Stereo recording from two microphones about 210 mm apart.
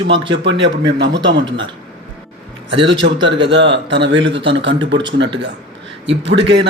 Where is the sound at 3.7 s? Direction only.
55° right (ahead or behind).